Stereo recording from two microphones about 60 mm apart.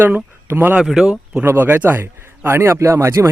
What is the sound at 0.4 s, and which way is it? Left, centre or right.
Speech, right.